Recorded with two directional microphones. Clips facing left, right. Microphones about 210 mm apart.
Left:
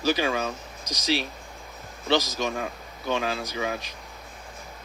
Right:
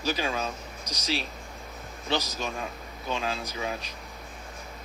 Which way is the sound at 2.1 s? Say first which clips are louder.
Left 6 dB; 75° left (ahead or behind).